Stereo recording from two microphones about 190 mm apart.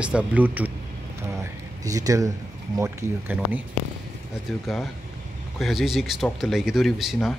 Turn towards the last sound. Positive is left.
turn(degrees=0)  # may be behind; listen again after turning